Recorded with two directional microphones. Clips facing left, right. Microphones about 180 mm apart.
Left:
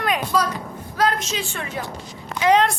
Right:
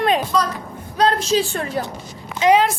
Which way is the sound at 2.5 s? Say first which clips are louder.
Right 2 dB; 5° right (ahead or behind).